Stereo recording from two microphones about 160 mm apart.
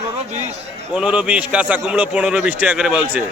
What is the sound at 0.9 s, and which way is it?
A man's voice, 5° right (ahead or behind).